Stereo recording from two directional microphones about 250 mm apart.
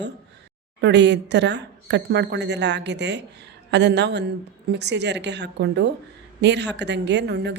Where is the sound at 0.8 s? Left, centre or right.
Right.